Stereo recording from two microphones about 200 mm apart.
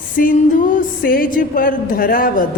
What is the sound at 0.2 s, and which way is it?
Music, 40° left (ahead or behind).